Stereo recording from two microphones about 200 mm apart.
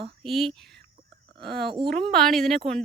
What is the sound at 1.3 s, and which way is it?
Speech, 55° right (ahead or behind).